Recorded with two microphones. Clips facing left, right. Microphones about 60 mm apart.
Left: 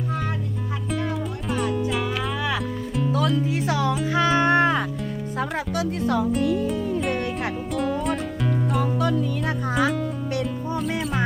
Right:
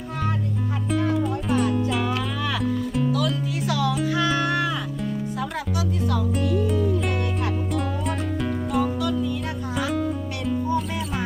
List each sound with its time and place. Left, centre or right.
0.9 s music: centre
3.7 s music: left
6.6 s music: centre
9.0 s music: left